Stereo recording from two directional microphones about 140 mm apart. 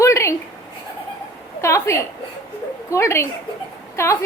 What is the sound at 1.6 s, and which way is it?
A woman's voice, 20° left (ahead or behind).